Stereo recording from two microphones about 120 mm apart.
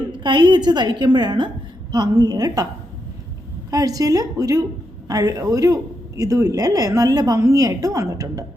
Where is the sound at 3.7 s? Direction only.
30° right (ahead or behind).